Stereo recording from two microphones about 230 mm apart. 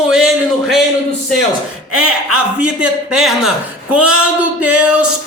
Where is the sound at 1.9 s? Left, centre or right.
Right.